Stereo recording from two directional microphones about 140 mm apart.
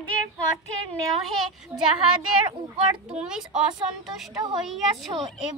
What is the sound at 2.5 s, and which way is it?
Speech, 45° right (ahead or behind).